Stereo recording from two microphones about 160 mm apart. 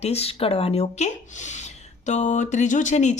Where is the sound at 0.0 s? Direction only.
40° left (ahead or behind).